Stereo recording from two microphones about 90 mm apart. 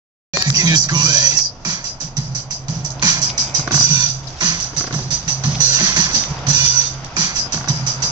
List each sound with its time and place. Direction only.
0.4 s music: 55° right (ahead or behind)
3.0 s music: 55° right (ahead or behind)